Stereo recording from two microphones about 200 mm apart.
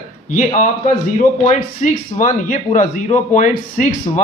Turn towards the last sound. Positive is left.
turn(degrees=40)  # may be behind; listen again after turning